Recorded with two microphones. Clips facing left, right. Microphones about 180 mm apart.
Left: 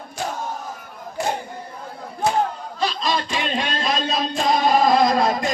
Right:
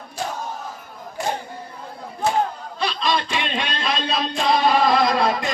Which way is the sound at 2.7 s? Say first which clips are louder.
Right 1 dB; 40° left (ahead or behind).